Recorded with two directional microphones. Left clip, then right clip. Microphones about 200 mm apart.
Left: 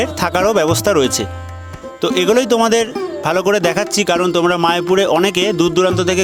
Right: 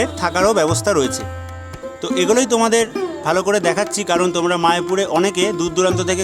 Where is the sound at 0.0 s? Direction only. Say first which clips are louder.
Left 1 dB; 30° left (ahead or behind).